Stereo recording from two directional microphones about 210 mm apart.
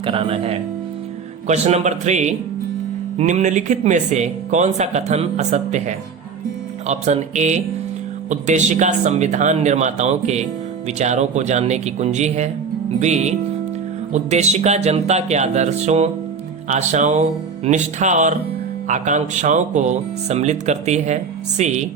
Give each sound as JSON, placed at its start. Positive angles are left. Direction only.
{"t": 0.0, "sound": "speech", "side_deg": -25}